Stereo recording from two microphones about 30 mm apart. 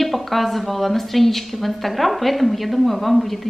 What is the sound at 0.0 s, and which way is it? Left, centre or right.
A woman's voice, centre.